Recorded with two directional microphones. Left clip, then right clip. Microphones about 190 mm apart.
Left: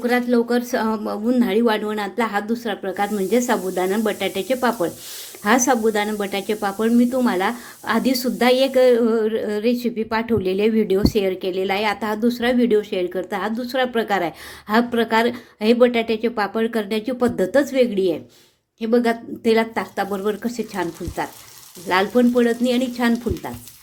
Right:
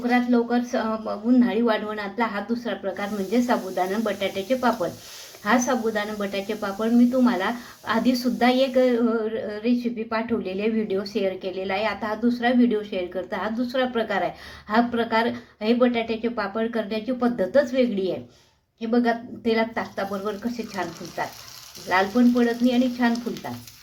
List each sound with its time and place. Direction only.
0.0 s speech: 60° left (ahead or behind)
21.8 s speech: 50° left (ahead or behind)